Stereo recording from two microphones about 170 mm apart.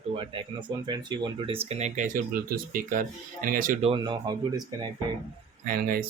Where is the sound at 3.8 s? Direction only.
30° right (ahead or behind).